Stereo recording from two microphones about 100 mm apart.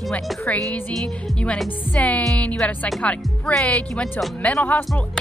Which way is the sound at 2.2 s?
5° left (ahead or behind).